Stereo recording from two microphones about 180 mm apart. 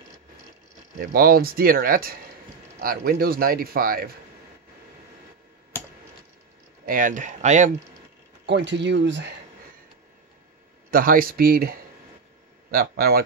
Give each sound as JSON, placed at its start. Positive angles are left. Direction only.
{"t": 1.1, "sound": "a man's voice", "side_deg": -55}
{"t": 6.9, "sound": "speech", "side_deg": -45}
{"t": 8.5, "sound": "speech", "side_deg": -75}
{"t": 10.9, "sound": "a man's voice", "side_deg": -50}